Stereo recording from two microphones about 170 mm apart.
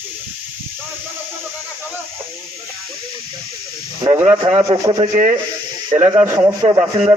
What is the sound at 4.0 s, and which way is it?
Speech, 20° right (ahead or behind).